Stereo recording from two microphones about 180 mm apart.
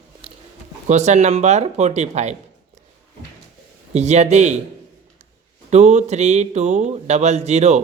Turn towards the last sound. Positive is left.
turn(degrees=-40)  # may be behind; listen again after turning